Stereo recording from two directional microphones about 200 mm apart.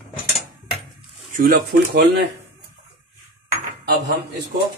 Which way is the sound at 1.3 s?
45° right (ahead or behind).